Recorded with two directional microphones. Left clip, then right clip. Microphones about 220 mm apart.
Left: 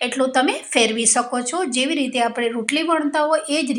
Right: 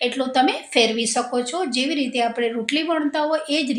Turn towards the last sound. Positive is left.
turn(degrees=15)  # may be behind; listen again after turning